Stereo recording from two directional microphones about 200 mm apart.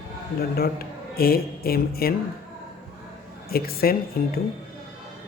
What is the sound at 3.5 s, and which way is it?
Music, 50° left (ahead or behind).